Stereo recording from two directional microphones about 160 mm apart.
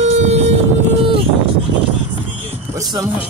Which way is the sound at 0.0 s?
45° right (ahead or behind).